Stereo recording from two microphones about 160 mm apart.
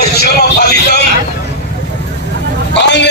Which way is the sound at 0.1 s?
85° left.